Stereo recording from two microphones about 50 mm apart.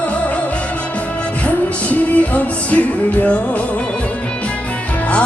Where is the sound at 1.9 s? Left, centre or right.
Left.